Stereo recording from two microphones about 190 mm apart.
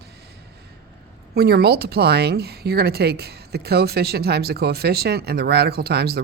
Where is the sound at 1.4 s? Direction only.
60° right (ahead or behind).